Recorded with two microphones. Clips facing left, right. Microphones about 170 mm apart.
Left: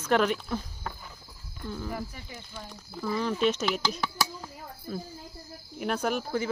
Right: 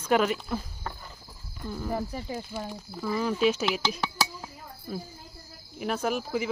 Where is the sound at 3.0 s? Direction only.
5° right (ahead or behind).